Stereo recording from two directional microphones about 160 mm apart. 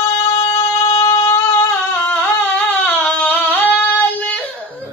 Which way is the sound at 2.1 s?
10° left (ahead or behind).